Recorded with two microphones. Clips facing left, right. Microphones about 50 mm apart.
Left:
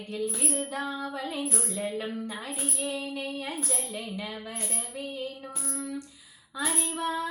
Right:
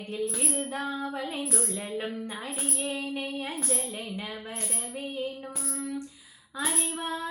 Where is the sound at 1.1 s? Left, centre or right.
Right.